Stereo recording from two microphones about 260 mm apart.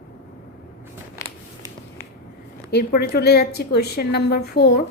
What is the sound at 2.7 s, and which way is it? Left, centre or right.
A woman's voice, left.